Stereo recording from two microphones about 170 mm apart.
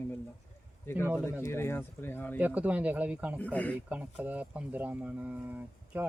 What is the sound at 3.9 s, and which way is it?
Speech, 10° right (ahead or behind).